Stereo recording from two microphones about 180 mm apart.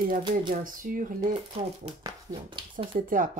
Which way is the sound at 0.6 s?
50° right (ahead or behind).